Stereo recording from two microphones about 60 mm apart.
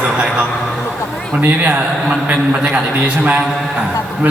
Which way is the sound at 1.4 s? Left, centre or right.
Right.